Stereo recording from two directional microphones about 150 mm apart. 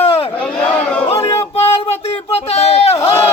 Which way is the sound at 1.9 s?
45° left (ahead or behind).